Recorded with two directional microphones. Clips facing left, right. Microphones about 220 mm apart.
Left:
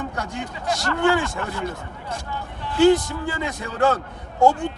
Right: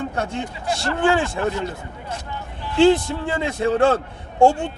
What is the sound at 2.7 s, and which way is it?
A man's voice, 25° right (ahead or behind).